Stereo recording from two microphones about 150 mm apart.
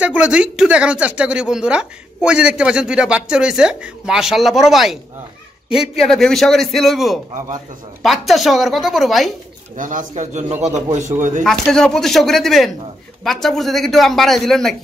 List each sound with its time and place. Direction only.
0.0 s speech: 5° right (ahead or behind)
9.8 s a man's voice: 60° right (ahead or behind)
11.4 s speech: 5° left (ahead or behind)